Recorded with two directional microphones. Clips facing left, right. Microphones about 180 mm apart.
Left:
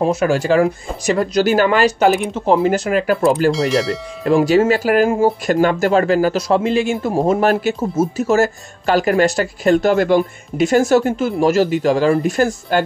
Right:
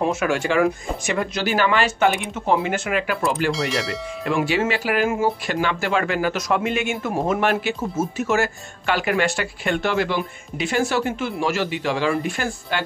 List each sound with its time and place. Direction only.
0.0 s speech: 35° left (ahead or behind)
3.5 s speech: centre (ahead or behind)
4.2 s speech: 40° left (ahead or behind)